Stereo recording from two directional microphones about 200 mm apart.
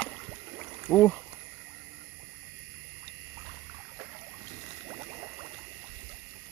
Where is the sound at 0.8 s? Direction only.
5° left (ahead or behind).